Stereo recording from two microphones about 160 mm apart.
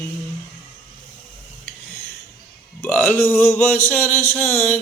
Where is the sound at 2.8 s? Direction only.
5° left (ahead or behind).